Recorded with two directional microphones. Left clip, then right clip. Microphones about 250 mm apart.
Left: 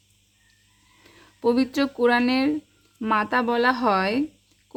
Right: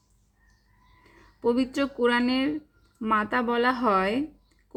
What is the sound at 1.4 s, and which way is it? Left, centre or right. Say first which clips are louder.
Speech: left 3 dB; centre.